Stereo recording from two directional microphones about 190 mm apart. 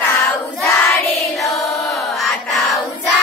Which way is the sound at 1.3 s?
Centre (ahead or behind).